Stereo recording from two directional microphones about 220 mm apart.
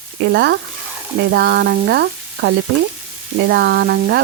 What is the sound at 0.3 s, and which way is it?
Frying, 50° right (ahead or behind).